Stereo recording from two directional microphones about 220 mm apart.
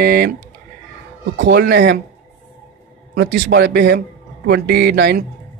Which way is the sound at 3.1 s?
55° right (ahead or behind).